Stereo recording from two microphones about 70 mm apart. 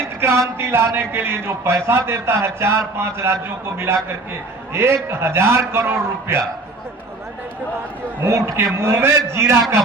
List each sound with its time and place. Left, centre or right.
0.2 s a man's voice: right
8.2 s a man's voice: right